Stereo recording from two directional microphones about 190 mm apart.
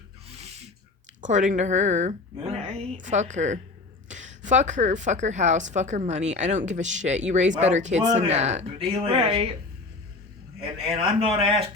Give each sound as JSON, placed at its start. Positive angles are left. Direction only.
{"t": 0.3, "sound": "a sound", "side_deg": -35}
{"t": 1.2, "sound": "a woman's voice", "side_deg": -40}
{"t": 10.6, "sound": "a man's voice", "side_deg": -30}